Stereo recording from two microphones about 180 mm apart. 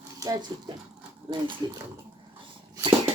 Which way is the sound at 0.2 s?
20° right (ahead or behind).